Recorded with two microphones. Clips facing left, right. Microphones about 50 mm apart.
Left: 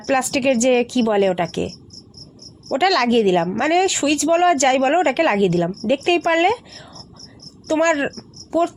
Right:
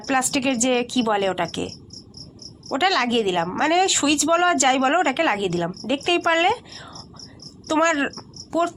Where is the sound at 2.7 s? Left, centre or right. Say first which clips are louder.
Left 4 dB; left.